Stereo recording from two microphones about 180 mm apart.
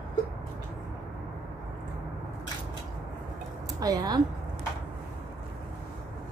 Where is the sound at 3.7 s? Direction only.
20° right (ahead or behind).